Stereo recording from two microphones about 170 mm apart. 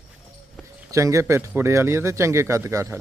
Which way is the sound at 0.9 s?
20° right (ahead or behind).